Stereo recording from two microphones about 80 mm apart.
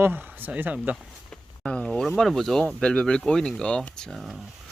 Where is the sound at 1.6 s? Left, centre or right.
Centre.